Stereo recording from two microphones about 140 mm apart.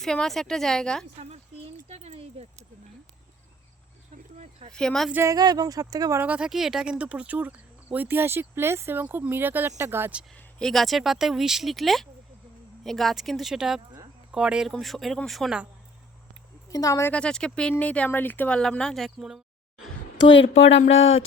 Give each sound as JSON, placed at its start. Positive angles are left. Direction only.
{"t": 0.0, "sound": "speech", "side_deg": 5}
{"t": 1.2, "sound": "a sound", "side_deg": -50}
{"t": 4.7, "sound": "speech", "side_deg": 5}
{"t": 5.1, "sound": "speech", "side_deg": -20}
{"t": 6.2, "sound": "speech", "side_deg": -10}
{"t": 10.3, "sound": "speech", "side_deg": 5}
{"t": 16.6, "sound": "a woman's voice", "side_deg": 25}
{"t": 17.1, "sound": "speech", "side_deg": 5}